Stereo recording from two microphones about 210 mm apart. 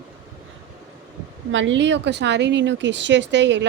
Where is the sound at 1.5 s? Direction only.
65° right (ahead or behind).